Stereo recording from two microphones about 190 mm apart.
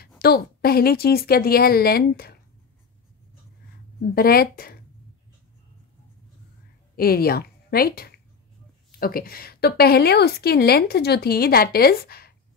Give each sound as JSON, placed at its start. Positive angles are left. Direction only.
{"t": 0.0, "sound": "a woman's voice", "side_deg": 55}
{"t": 4.1, "sound": "a woman's voice", "side_deg": 50}
{"t": 7.0, "sound": "a woman's voice", "side_deg": 50}